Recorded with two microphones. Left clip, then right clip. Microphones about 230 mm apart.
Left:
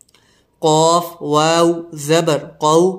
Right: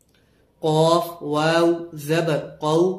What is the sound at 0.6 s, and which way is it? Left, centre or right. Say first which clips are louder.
Speech: left 5 dB; left.